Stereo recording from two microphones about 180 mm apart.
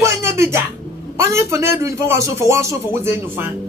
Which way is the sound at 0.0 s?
15° right (ahead or behind).